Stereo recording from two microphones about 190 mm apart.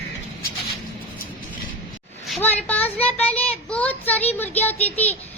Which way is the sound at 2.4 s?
10° left (ahead or behind).